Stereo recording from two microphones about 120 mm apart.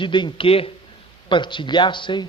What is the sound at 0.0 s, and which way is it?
A man's voice, 40° left (ahead or behind).